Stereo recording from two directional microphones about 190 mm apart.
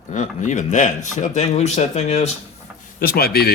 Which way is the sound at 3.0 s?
55° left (ahead or behind).